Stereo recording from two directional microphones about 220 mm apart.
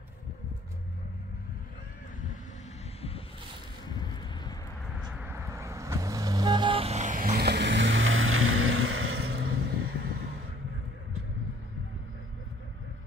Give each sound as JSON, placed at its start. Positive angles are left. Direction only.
{"t": 4.0, "sound": "vehicle", "side_deg": 20}
{"t": 5.1, "sound": "vehicle", "side_deg": -10}
{"t": 9.3, "sound": "vehicle", "side_deg": -50}